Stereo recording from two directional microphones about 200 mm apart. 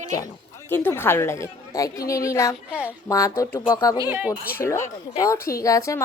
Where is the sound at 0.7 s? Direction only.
10° left (ahead or behind).